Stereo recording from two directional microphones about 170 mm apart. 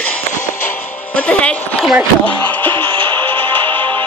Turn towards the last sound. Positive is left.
turn(degrees=10)  # may be behind; listen again after turning